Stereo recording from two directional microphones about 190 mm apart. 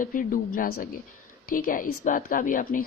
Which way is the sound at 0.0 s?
45° left (ahead or behind).